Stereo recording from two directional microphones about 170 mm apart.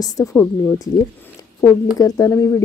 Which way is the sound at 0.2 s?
15° left (ahead or behind).